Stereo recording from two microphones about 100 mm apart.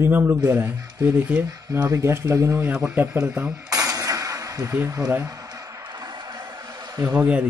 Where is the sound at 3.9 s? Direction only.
35° right (ahead or behind).